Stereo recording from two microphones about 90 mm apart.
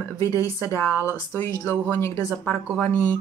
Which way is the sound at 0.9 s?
25° right (ahead or behind).